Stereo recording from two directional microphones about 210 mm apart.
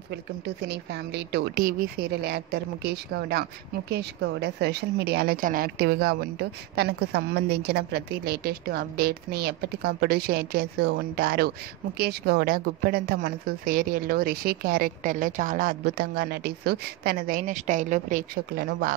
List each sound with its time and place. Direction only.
0.1 s a woman's voice: 50° right (ahead or behind)